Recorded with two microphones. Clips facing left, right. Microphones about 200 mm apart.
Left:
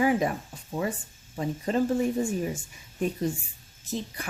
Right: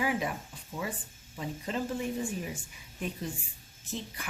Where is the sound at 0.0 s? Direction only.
45° left (ahead or behind).